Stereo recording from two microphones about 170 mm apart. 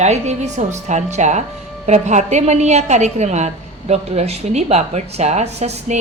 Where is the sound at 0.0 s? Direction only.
40° right (ahead or behind).